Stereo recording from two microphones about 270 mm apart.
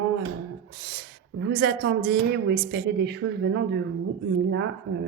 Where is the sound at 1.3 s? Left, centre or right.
Right.